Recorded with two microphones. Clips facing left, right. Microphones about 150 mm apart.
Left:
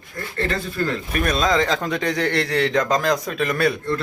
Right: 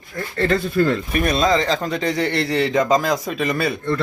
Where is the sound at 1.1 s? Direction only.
5° right (ahead or behind).